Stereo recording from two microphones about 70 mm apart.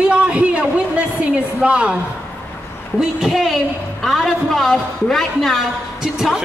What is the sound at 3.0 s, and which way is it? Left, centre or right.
A man's voice, centre.